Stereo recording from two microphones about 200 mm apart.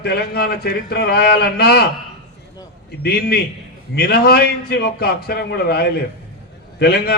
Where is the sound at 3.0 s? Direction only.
50° left (ahead or behind).